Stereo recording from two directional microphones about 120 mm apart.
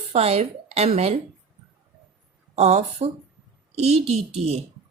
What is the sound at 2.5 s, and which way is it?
A child's voice, 65° right (ahead or behind).